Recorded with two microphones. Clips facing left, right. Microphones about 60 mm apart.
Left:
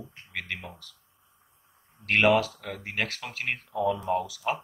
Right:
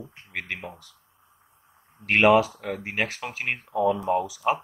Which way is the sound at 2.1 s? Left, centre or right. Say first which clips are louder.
Right 4 dB; right.